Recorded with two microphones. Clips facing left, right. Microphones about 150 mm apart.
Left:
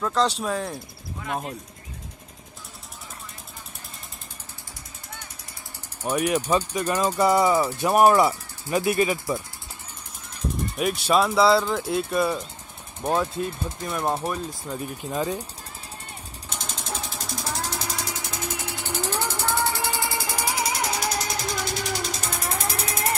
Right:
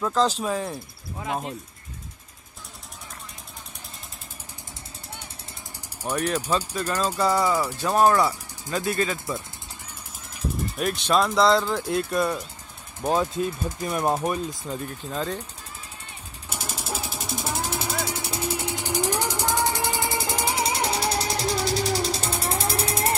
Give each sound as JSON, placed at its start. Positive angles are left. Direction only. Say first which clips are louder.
{"t": 0.0, "sound": "speech", "louder": "right 1 dB", "side_deg": 0}
{"t": 6.0, "sound": "speech", "louder": "left 2 dB", "side_deg": 10}
{"t": 10.8, "sound": "speech", "louder": "left 1 dB", "side_deg": 5}
{"t": 14.7, "sound": "speech", "louder": "left 1 dB", "side_deg": 10}
{"t": 16.4, "sound": "jackhammer", "louder": "right 2 dB", "side_deg": -5}
{"t": 17.2, "sound": "music", "louder": "right 2 dB", "side_deg": -25}
{"t": 18.0, "sound": "a sound", "louder": "right 3 dB", "side_deg": -30}
{"t": 18.7, "sound": "music", "louder": "right 2 dB", "side_deg": -15}